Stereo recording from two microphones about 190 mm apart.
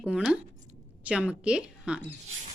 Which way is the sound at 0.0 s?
5° right (ahead or behind).